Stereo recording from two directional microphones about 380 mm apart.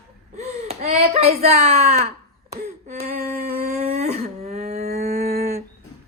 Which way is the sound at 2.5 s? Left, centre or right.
Right.